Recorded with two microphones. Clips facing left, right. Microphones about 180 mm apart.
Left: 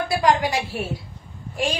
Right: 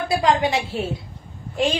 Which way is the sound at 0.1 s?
25° right (ahead or behind).